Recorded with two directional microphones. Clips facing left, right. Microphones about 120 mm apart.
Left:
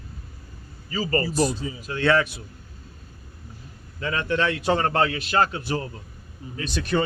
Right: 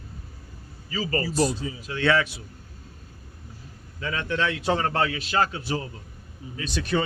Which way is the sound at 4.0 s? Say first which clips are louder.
Left 3 dB; 55° left (ahead or behind).